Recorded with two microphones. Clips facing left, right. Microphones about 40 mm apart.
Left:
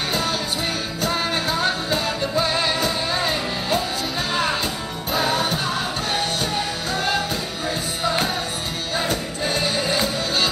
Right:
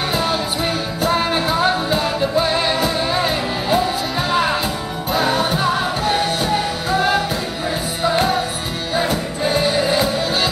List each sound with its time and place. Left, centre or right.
0.1 s music: centre
5.1 s music: centre